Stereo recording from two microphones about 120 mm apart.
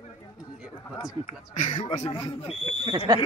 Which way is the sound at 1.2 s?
90° left.